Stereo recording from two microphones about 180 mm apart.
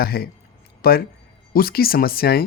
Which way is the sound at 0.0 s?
60° left (ahead or behind).